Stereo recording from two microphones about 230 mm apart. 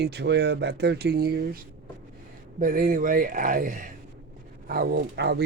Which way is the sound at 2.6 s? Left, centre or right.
Right.